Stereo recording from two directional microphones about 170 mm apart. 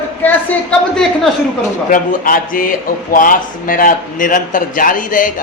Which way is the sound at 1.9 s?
55° left (ahead or behind).